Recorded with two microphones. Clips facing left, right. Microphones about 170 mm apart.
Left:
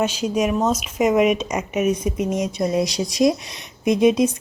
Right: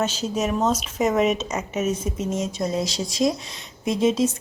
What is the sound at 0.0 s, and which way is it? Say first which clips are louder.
Speech: left 4 dB; 10° left (ahead or behind).